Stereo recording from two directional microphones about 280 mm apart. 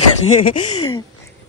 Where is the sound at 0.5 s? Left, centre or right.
Left.